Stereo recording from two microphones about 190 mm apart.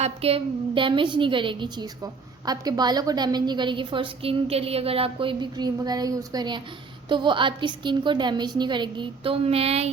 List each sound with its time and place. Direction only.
0.0 s a woman's voice: 30° right (ahead or behind)